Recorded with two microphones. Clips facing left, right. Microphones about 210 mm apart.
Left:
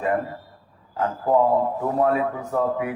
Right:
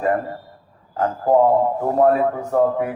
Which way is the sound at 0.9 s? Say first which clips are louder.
Right 4 dB; 40° right (ahead or behind).